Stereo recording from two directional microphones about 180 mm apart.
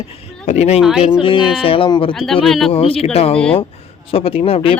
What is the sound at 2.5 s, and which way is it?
Speech, centre (ahead or behind).